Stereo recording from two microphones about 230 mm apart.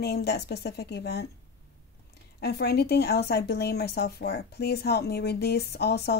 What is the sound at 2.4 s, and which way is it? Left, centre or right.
Speech, left.